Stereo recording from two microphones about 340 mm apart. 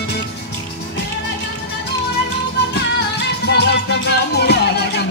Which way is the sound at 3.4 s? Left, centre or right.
Left.